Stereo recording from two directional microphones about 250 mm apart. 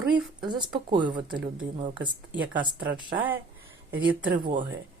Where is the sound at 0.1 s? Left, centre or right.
Centre.